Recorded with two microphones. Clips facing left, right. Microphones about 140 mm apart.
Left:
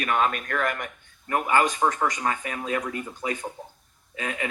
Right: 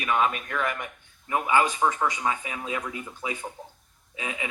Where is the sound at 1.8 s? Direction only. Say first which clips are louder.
Left 1 dB; 35° left (ahead or behind).